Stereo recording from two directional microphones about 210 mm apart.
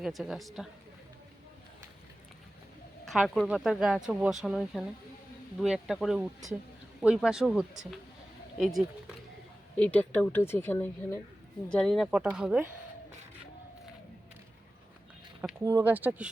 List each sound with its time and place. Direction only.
0.0 s speech: centre (ahead or behind)
3.1 s speech: centre (ahead or behind)
15.6 s speech: 10° right (ahead or behind)